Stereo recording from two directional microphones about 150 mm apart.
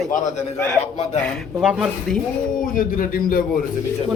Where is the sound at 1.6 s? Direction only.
5° right (ahead or behind).